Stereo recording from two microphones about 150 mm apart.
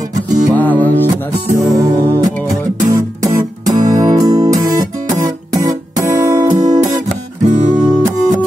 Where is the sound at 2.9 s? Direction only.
20° right (ahead or behind).